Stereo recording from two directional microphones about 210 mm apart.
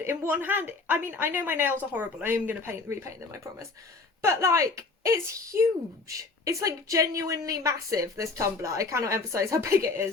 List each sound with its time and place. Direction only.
0.0 s a woman's voice: 10° right (ahead or behind)